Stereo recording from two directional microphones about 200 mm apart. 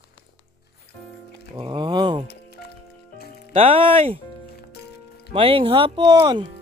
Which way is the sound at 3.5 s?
30° right (ahead or behind).